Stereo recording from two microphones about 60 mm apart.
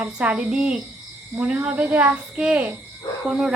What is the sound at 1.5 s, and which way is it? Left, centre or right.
Speech, right.